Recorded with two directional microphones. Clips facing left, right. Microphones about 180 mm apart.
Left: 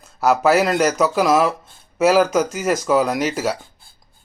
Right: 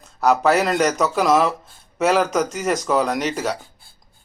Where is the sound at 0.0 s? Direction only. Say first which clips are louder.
Left 1 dB; 5° left (ahead or behind).